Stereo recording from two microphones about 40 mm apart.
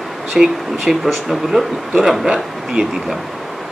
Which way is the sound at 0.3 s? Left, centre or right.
Centre.